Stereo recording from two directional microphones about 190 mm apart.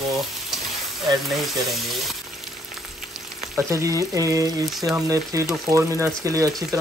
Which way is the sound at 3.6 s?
15° right (ahead or behind).